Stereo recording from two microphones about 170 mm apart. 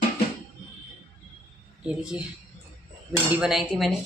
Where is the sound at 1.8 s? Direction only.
5° right (ahead or behind).